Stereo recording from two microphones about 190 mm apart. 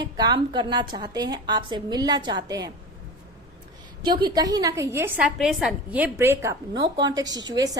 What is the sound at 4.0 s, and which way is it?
A woman's voice, 20° right (ahead or behind).